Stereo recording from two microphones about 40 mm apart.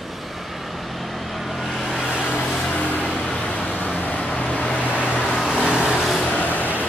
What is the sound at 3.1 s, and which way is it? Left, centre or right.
Vehicle, left.